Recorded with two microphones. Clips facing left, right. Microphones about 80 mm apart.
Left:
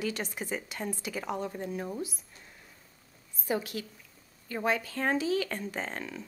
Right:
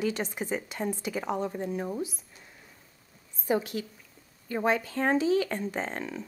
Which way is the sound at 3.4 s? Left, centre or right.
Centre.